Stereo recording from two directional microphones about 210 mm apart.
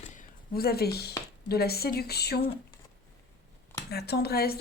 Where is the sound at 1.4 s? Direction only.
50° left (ahead or behind).